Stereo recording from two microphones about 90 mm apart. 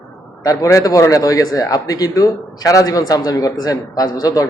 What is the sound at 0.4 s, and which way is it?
A man's voice, 35° left (ahead or behind).